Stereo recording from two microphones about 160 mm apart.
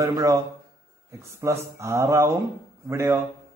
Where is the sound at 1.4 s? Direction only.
20° right (ahead or behind).